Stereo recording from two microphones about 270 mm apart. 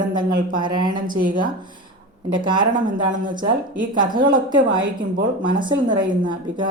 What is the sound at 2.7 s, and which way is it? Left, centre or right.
Speech, right.